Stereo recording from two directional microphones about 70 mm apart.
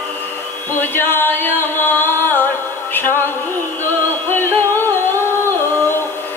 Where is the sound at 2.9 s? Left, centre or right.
Left.